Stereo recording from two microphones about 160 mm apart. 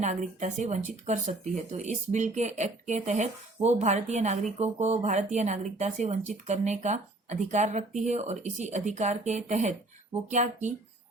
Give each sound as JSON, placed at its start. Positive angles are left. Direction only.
{"t": 0.0, "sound": "speech", "side_deg": -50}